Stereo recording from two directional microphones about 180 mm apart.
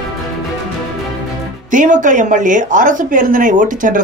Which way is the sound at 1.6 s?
45° right (ahead or behind).